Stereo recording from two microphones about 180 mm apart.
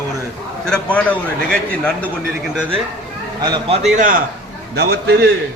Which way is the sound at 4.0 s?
50° right (ahead or behind).